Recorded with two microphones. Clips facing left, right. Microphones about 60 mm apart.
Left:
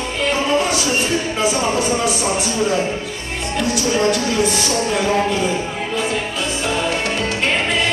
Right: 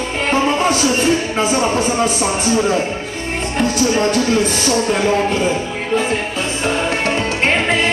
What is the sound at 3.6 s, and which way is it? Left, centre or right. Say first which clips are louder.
Speech: right 2 dB; right.